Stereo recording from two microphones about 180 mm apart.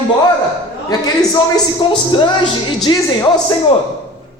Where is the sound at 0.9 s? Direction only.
20° left (ahead or behind).